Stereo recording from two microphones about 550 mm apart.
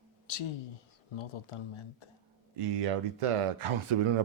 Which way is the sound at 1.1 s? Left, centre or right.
Left.